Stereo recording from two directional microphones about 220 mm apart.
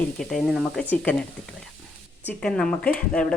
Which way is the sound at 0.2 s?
Centre (ahead or behind).